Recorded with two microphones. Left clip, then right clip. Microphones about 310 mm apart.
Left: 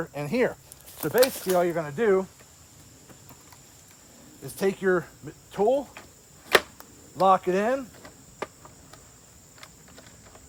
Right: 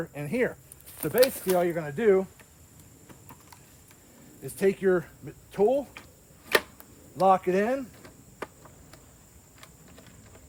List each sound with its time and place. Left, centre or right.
0.0 s speech: left
0.9 s speech: centre
4.4 s speech: centre
6.5 s arrow: centre